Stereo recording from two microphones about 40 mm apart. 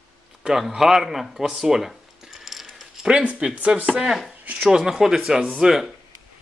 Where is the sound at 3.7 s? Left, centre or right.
Centre.